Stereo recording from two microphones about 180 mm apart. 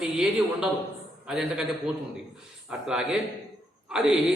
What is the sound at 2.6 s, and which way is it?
A man's voice, 5° right (ahead or behind).